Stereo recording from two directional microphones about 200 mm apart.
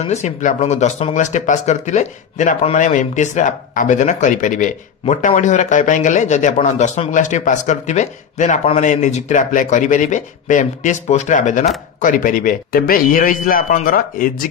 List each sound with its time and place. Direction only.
0.0 s a man's voice: 35° left (ahead or behind)